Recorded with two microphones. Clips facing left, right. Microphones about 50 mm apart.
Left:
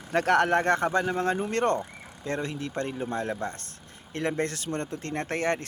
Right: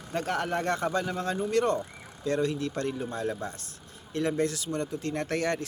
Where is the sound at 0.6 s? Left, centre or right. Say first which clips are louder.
Left 4 dB; left.